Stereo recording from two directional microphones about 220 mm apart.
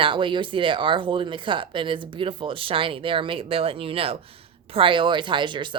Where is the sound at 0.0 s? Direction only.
20° right (ahead or behind).